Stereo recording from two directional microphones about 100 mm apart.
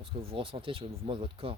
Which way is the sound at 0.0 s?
65° right (ahead or behind).